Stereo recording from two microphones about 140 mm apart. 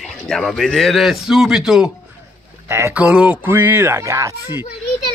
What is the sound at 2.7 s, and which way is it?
Speech, 20° right (ahead or behind).